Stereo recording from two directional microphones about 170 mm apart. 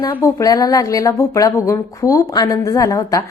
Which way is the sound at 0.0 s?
20° left (ahead or behind).